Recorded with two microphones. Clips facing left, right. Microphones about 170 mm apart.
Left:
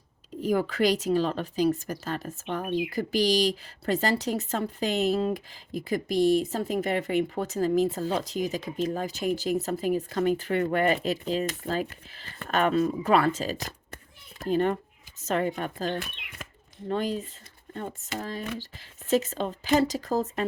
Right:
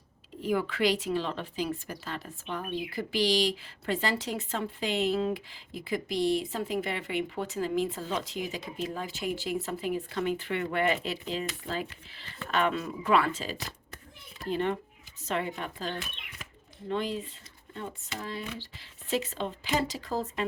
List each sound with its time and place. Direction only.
0.4 s a woman's voice: 40° left (ahead or behind)